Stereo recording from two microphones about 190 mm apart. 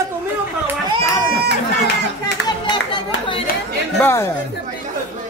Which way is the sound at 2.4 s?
25° left (ahead or behind).